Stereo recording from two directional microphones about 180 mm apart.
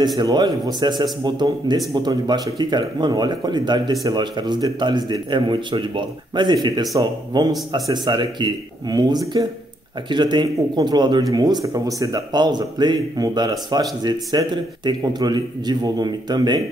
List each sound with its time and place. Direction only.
0.2 s speech: 25° right (ahead or behind)